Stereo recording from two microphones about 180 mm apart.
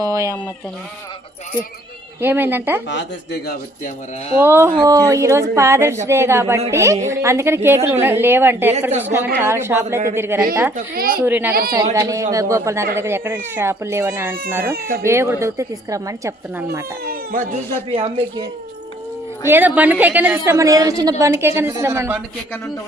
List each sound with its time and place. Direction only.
0.0 s a woman's voice: 15° right (ahead or behind)
2.2 s a woman's voice: 10° right (ahead or behind)
2.9 s speech: 80° left
4.4 s a woman's voice: 15° right (ahead or behind)
8.9 s speech: 35° right (ahead or behind)
9.4 s a woman's voice: 15° right (ahead or behind)
10.8 s a woman's voice: 55° right (ahead or behind)
11.2 s a woman's voice: 10° right (ahead or behind)
14.8 s speech: 55° right (ahead or behind)
15.0 s a woman's voice: 15° right (ahead or behind)
17.9 s speech: 30° right (ahead or behind)
19.5 s a woman's voice: 10° right (ahead or behind)